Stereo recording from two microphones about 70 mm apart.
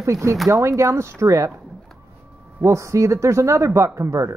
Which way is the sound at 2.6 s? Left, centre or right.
Right.